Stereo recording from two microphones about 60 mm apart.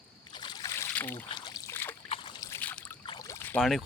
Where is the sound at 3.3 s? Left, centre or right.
Left.